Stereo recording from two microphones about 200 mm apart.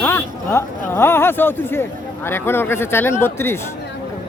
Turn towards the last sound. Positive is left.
turn(degrees=10)  # may be behind; listen again after turning